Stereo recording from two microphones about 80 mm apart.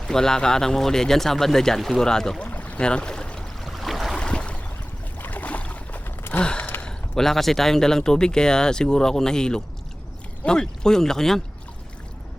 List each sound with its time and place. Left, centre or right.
0.1 s speech: centre
2.5 s boat: centre
6.4 s a sound: centre
6.8 s speech: centre